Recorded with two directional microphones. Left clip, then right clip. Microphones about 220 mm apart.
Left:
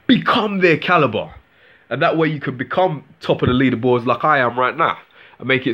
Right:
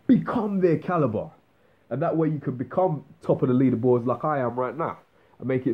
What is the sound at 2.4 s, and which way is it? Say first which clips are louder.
Speech: left 8 dB; 20° left (ahead or behind).